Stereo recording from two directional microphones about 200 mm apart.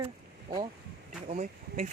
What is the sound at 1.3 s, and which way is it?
Speech, 40° right (ahead or behind).